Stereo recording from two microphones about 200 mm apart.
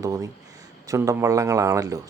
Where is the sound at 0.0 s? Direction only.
15° right (ahead or behind).